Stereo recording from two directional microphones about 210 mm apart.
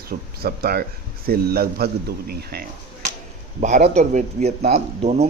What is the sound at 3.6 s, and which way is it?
Speech, 35° right (ahead or behind).